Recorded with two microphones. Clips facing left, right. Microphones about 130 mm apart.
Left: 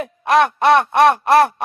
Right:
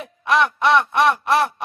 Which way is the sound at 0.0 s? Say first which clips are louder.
Left 4 dB; 50° left (ahead or behind).